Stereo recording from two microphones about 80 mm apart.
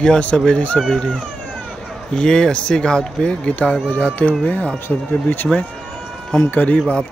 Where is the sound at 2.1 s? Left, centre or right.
Centre.